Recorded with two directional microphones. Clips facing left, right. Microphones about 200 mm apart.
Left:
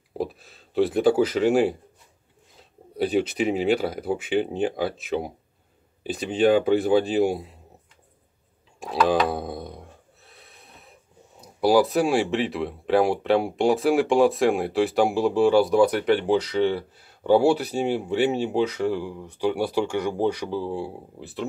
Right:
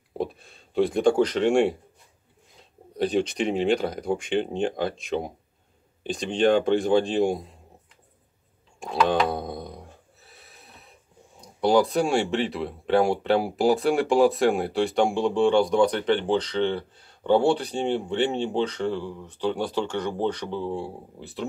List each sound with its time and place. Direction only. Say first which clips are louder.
0.2 s speech: even; centre (ahead or behind)
2.9 s speech: left 1 dB; 5° left (ahead or behind)
8.7 s a sound: left 1 dB; centre (ahead or behind)
11.4 s speech: left 1 dB; 5° left (ahead or behind)